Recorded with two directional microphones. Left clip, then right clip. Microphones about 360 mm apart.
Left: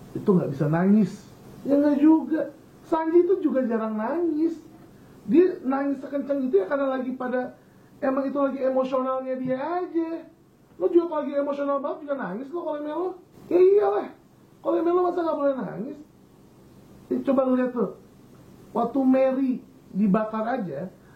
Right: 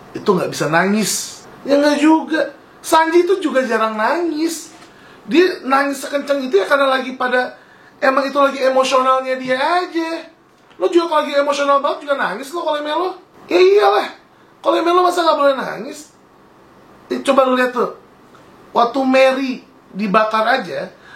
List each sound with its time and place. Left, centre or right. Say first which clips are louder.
0.3 s a man's voice: right 8 dB; centre
17.1 s speech: right 9 dB; centre
19.0 s a man's voice: right 9 dB; centre